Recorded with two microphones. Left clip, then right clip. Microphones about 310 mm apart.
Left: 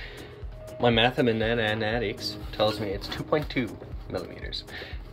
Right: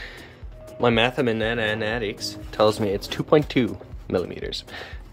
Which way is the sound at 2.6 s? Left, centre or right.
Right.